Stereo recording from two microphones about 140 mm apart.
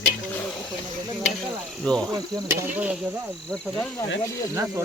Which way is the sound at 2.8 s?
10° right (ahead or behind).